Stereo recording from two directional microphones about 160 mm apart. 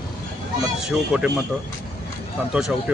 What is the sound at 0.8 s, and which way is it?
Speech, 5° right (ahead or behind).